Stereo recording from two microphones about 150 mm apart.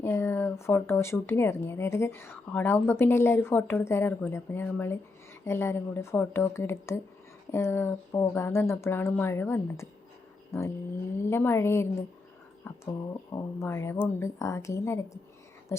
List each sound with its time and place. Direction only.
0.0 s a woman's voice: 15° left (ahead or behind)